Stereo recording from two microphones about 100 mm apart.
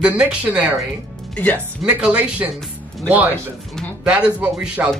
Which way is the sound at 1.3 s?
15° left (ahead or behind).